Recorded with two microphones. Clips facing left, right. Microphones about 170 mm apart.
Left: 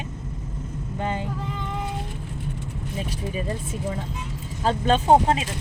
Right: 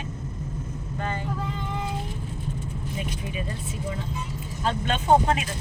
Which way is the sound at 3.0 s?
35° left (ahead or behind).